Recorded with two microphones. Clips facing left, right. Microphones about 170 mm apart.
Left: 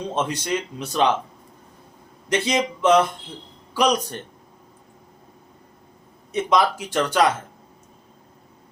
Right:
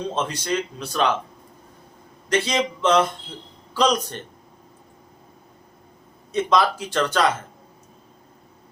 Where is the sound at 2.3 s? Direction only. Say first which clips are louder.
Even; 15° left (ahead or behind).